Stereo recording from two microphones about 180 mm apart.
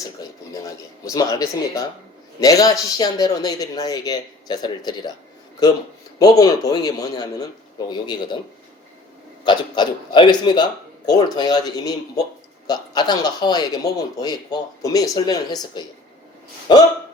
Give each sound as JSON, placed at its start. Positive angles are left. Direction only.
{"t": 0.2, "sound": "speech", "side_deg": 20}
{"t": 6.1, "sound": "speech", "side_deg": 20}
{"t": 9.4, "sound": "speech", "side_deg": 25}